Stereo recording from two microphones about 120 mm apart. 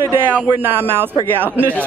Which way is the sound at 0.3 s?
15° right (ahead or behind).